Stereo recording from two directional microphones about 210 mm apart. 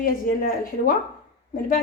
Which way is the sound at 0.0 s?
45° left (ahead or behind).